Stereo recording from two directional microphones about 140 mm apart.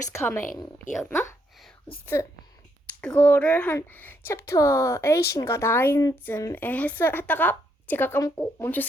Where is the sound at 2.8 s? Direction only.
10° left (ahead or behind).